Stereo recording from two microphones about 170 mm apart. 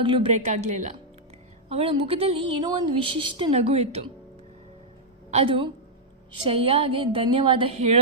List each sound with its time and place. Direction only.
0.0 s a woman's voice: 30° right (ahead or behind)
0.3 s speech: 45° right (ahead or behind)
1.7 s a woman's voice: 35° right (ahead or behind)
5.3 s a woman's voice: 35° right (ahead or behind)